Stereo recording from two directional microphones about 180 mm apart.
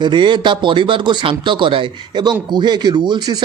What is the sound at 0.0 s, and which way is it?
A man's voice, 25° right (ahead or behind).